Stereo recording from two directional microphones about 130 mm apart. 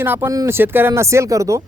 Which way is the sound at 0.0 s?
15° right (ahead or behind).